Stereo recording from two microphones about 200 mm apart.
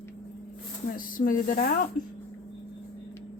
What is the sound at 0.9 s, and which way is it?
Speech, 45° left (ahead or behind).